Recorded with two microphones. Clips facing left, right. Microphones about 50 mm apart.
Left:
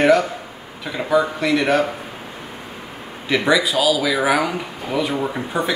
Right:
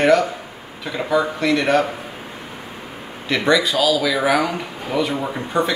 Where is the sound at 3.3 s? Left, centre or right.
Centre.